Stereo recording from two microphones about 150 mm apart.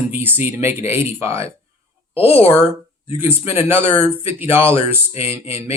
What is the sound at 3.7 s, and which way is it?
Speech, 35° left (ahead or behind).